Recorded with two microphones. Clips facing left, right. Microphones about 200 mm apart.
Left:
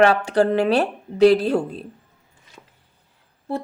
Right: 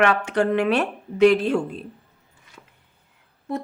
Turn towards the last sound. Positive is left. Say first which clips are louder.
# left 1 dB
turn(degrees=30)  # may be behind; listen again after turning